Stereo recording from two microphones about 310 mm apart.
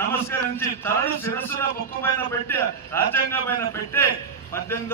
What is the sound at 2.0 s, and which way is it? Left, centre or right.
A man's voice, centre.